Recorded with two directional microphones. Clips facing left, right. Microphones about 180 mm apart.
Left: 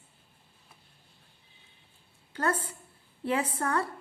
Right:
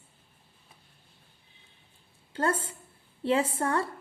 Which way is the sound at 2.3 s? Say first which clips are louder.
Right 1 dB; 30° right (ahead or behind).